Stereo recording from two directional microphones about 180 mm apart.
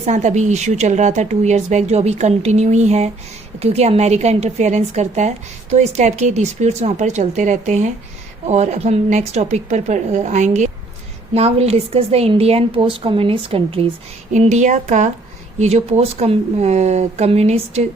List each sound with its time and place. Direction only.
0.0 s speech: 40° right (ahead or behind)
14.3 s speech: 40° right (ahead or behind)